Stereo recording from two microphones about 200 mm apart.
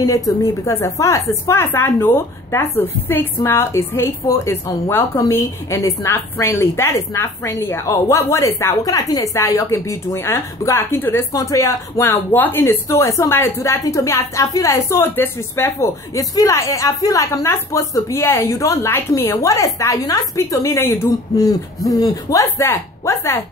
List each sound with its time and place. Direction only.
0.4 s a woman's voice: 15° left (ahead or behind)